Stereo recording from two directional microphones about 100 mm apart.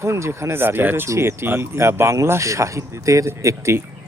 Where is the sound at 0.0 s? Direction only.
30° right (ahead or behind).